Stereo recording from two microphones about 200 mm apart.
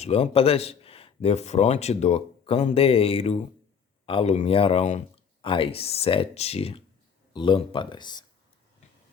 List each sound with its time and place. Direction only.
0.0 s a man's voice: 30° left (ahead or behind)